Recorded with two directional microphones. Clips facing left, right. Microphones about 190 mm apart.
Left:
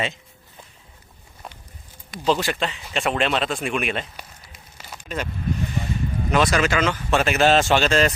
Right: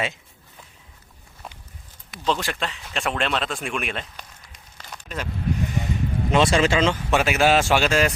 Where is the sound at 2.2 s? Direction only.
5° left (ahead or behind).